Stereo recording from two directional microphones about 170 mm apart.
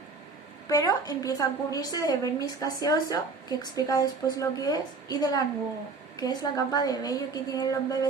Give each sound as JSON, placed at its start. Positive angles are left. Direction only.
{"t": 0.7, "sound": "a woman's voice", "side_deg": 20}